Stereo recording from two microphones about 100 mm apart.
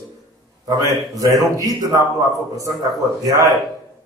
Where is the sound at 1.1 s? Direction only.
35° right (ahead or behind).